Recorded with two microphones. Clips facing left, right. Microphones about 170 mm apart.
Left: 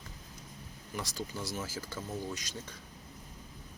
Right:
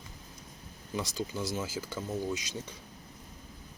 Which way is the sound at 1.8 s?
15° right (ahead or behind).